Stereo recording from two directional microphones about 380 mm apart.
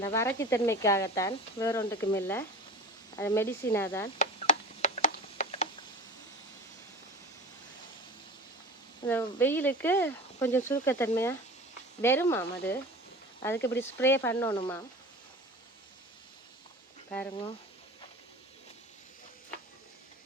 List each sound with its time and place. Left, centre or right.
0.0 s speech: centre
4.2 s a sound: centre
9.0 s speech: centre